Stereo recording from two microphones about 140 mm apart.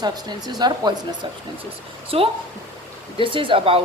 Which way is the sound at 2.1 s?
45° right (ahead or behind).